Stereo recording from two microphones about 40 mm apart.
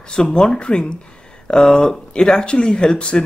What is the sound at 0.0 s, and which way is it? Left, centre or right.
Speech, left.